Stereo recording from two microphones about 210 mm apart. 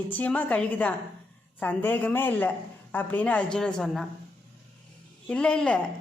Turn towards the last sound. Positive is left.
turn(degrees=5)  # may be behind; listen again after turning